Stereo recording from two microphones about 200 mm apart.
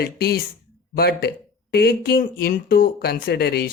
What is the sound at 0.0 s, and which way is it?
A man's voice, 50° left (ahead or behind).